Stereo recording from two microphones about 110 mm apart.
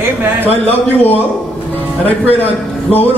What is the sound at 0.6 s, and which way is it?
A man's voice, 15° left (ahead or behind).